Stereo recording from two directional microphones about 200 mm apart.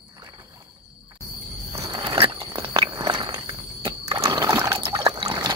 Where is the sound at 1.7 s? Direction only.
20° right (ahead or behind).